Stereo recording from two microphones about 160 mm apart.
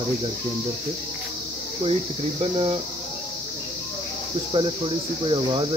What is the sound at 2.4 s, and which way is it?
Speech, 35° right (ahead or behind).